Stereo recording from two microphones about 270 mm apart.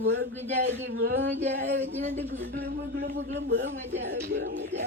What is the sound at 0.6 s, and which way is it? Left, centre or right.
Speech, right.